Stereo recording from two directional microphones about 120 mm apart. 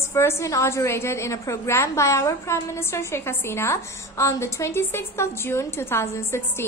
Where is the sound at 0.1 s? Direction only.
25° left (ahead or behind).